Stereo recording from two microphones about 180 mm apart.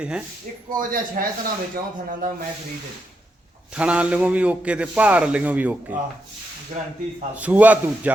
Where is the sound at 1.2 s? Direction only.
50° right (ahead or behind).